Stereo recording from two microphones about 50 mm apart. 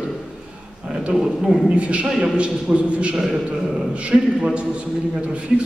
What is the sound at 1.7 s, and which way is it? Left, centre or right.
A man's voice, right.